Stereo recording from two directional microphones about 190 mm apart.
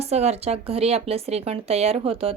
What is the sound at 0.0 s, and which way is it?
Speech, 35° right (ahead or behind).